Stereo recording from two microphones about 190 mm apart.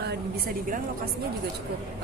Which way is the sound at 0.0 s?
55° right (ahead or behind).